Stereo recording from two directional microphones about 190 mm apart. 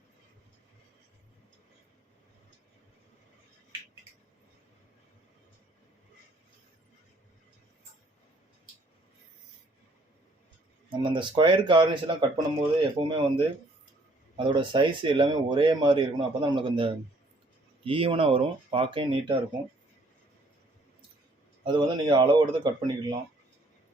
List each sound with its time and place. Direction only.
10.8 s speech: 25° right (ahead or behind)
21.6 s speech: 25° right (ahead or behind)